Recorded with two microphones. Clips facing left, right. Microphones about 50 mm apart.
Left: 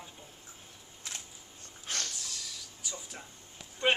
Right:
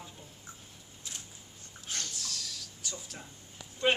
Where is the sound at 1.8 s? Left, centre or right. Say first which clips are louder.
Left 2 dB; left.